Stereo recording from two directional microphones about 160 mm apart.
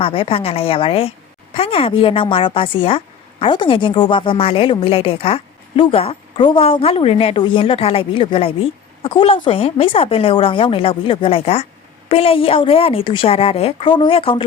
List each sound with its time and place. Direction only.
0.0 s a woman's voice: 35° left (ahead or behind)